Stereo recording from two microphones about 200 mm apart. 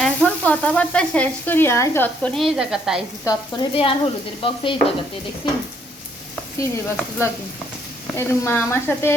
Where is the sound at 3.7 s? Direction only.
25° left (ahead or behind).